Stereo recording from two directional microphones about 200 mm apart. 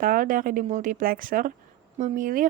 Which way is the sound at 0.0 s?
45° right (ahead or behind).